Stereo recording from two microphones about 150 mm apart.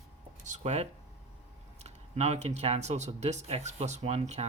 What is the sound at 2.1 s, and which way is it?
Speech, 50° right (ahead or behind).